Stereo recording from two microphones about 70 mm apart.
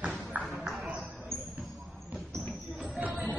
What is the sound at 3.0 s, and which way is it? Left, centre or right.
Music, right.